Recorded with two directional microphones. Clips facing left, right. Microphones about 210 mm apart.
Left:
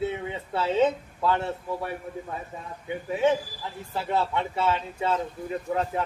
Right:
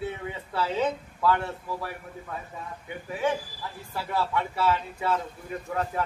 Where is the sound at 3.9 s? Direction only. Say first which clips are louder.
Left 2 dB; 25° left (ahead or behind).